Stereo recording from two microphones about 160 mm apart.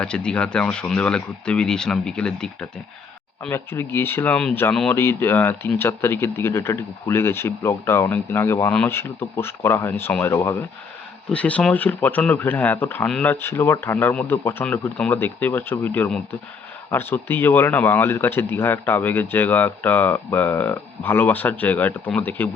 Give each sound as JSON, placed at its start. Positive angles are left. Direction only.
{"t": 0.0, "sound": "speech", "side_deg": 5}